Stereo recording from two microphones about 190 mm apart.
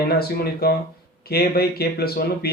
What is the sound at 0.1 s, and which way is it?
Speech, 55° left (ahead or behind).